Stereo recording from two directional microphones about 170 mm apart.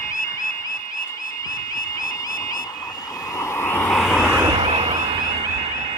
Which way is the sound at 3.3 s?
15° left (ahead or behind).